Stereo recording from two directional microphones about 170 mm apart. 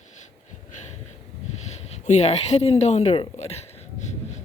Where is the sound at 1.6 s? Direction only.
40° left (ahead or behind).